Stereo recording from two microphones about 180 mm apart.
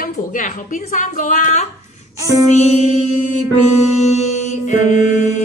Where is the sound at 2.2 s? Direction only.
20° right (ahead or behind).